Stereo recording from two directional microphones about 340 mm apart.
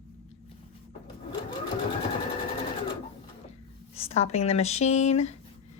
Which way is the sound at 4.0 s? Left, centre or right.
Centre.